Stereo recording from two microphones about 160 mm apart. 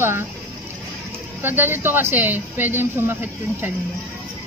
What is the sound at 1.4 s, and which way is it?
Speech, 15° right (ahead or behind).